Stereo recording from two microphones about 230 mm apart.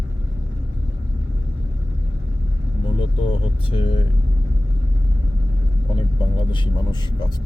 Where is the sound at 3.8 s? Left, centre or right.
Left.